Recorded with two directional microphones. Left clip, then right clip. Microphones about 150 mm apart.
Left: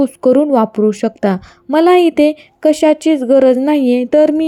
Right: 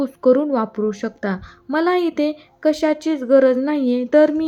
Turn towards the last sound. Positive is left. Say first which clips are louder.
# left 4 dB
turn(degrees=40)  # may be behind; listen again after turning